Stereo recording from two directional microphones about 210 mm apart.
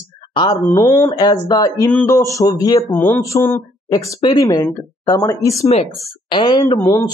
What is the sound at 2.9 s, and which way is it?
A man's voice, 10° left (ahead or behind).